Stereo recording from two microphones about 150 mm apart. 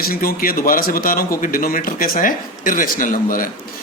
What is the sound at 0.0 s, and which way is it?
Speech, 80° left.